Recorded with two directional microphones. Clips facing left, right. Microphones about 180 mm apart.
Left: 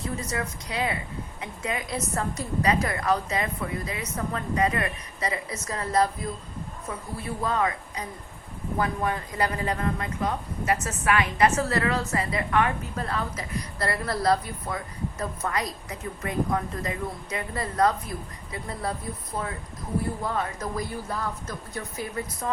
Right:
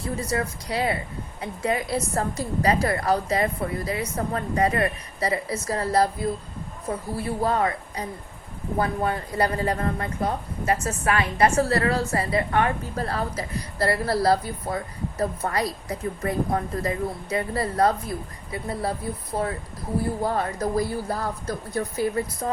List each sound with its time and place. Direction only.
0.2 s speech: 35° right (ahead or behind)